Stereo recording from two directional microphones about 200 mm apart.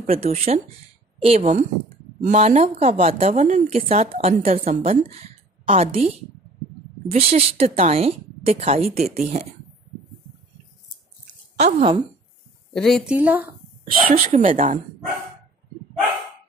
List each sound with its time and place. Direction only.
0.0 s a woman's voice: 30° right (ahead or behind)
11.5 s speech: 30° right (ahead or behind)
12.7 s a woman's voice: centre (ahead or behind)
14.1 s a woman's voice: 40° right (ahead or behind)